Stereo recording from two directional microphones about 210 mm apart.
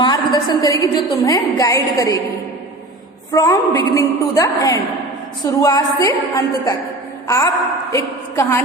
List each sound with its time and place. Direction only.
0.0 s a woman's voice: 20° left (ahead or behind)
3.3 s a woman's voice: 15° left (ahead or behind)